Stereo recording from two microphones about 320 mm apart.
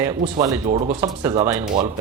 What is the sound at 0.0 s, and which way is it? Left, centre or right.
Speech, centre.